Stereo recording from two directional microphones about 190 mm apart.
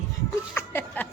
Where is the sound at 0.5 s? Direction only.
10° left (ahead or behind).